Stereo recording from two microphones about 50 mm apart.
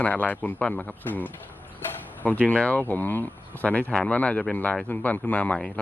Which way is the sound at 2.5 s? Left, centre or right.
Left.